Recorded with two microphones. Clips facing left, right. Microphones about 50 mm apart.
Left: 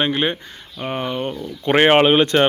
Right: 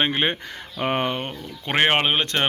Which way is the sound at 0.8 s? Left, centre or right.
Right.